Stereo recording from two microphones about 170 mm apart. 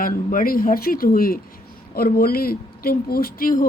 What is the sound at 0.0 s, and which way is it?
A woman's voice, 55° left (ahead or behind).